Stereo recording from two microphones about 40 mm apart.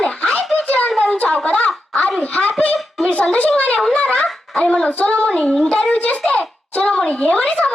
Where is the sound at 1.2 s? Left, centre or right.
Left.